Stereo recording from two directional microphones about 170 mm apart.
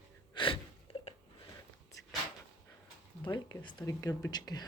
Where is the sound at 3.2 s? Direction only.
25° left (ahead or behind).